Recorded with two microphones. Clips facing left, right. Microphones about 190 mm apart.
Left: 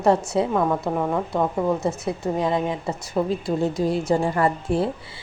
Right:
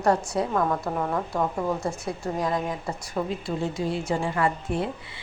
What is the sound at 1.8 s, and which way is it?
A woman's voice, 20° left (ahead or behind).